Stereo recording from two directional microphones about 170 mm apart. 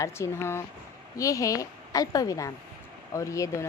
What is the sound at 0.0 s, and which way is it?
A woman's voice, 15° left (ahead or behind).